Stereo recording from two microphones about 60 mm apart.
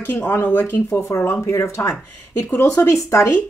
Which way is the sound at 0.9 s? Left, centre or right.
Left.